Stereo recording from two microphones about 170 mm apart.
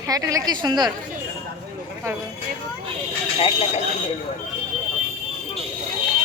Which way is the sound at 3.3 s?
35° left (ahead or behind).